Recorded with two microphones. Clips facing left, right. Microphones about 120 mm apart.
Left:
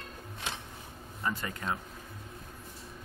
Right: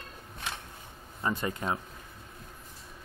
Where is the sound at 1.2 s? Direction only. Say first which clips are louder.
Right 4 dB; 20° right (ahead or behind).